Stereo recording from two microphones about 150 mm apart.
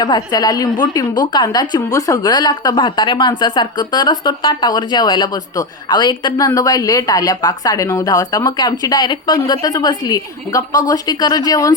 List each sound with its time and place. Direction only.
0.0 s a woman's voice: 25° left (ahead or behind)